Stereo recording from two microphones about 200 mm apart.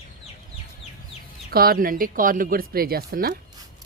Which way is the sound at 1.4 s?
50° right (ahead or behind).